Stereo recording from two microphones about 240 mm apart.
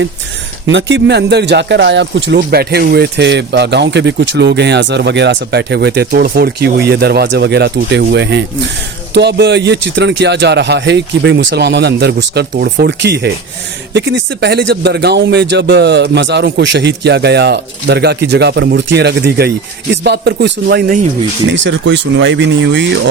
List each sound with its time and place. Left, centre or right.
0.7 s speech: right